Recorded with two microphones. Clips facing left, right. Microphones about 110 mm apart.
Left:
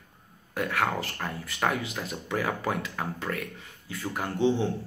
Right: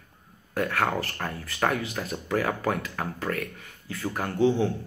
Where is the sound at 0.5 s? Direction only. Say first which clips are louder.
Right 2 dB; 15° left (ahead or behind).